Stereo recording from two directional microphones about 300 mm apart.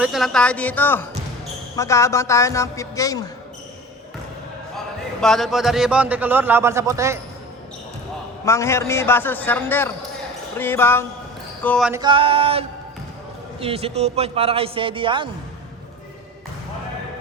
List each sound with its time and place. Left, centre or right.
0.0 s a man's voice: centre
5.2 s a man's voice: centre
8.4 s a woman's voice: centre
11.9 s music: centre
13.6 s a man's voice: centre